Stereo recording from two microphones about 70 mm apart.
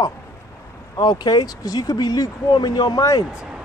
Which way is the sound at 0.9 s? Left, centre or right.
Left.